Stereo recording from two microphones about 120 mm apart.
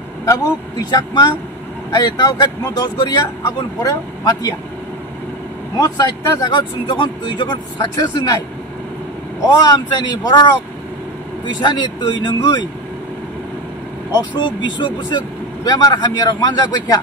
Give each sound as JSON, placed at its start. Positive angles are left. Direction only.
{"t": 0.2, "sound": "speech", "side_deg": 30}
{"t": 5.8, "sound": "speech", "side_deg": 30}
{"t": 9.7, "sound": "speech", "side_deg": 30}
{"t": 11.4, "sound": "speech", "side_deg": 40}
{"t": 14.3, "sound": "speech", "side_deg": 40}